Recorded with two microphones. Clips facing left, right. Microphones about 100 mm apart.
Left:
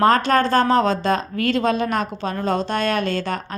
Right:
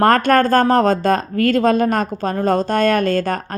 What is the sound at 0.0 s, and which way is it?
Speech, 50° right (ahead or behind).